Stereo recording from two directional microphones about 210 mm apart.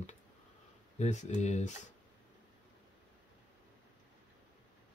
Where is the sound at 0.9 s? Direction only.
35° left (ahead or behind).